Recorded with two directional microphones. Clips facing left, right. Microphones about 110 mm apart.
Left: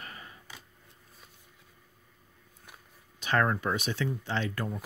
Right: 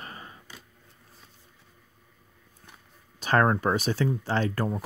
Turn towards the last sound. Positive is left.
turn(degrees=-40)  # may be behind; listen again after turning